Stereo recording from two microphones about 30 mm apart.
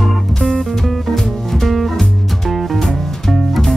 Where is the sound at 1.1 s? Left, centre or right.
Centre.